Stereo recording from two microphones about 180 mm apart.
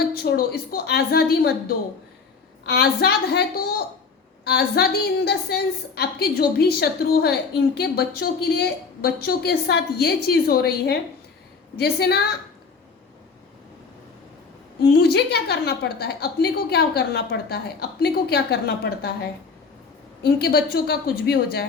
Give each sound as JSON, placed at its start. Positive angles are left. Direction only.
{"t": 0.0, "sound": "a woman's voice", "side_deg": 60}
{"t": 4.4, "sound": "a woman's voice", "side_deg": 60}
{"t": 14.9, "sound": "a woman's voice", "side_deg": 65}
{"t": 20.4, "sound": "a woman's voice", "side_deg": 60}